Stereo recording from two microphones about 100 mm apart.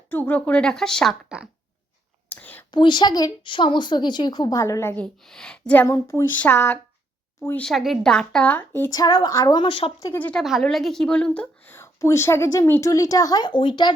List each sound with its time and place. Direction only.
0.1 s a woman's voice: 15° left (ahead or behind)
2.3 s whispering: 15° left (ahead or behind)
2.7 s a woman's voice: 50° left (ahead or behind)
4.6 s a woman's voice: 30° left (ahead or behind)
4.9 s a woman's voice: 5° left (ahead or behind)
5.7 s a woman's voice: 25° left (ahead or behind)
6.4 s a woman's voice: 15° left (ahead or behind)
7.6 s a woman's voice: centre (ahead or behind); by 8.9 s 20° left (ahead or behind)
8.9 s a woman's voice: 40° left (ahead or behind); by 9.9 s 55° left (ahead or behind)
10.2 s a woman's voice: 15° left (ahead or behind)
10.4 s a woman's voice: centre (ahead or behind); by 13.9 s 55° left (ahead or behind)